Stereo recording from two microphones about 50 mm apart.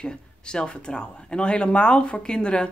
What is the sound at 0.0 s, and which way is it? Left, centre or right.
Speech, centre.